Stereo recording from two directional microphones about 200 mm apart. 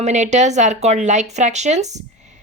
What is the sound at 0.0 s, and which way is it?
A woman's voice, 35° right (ahead or behind).